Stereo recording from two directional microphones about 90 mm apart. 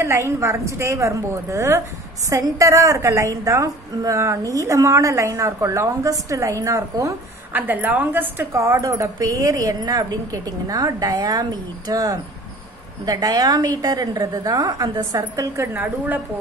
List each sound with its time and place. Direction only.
0.0 s a woman's voice: 30° right (ahead or behind)
7.5 s a woman's voice: 20° right (ahead or behind)
8.5 s a woman's voice: 35° right (ahead or behind)
15.7 s a woman's voice: 20° right (ahead or behind)